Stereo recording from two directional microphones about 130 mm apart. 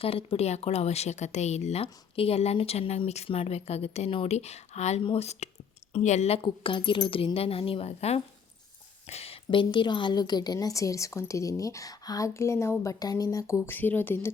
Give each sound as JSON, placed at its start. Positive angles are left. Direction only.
{"t": 0.0, "sound": "speech", "side_deg": 45}
{"t": 6.4, "sound": "a woman's voice", "side_deg": 40}
{"t": 13.7, "sound": "speech", "side_deg": 15}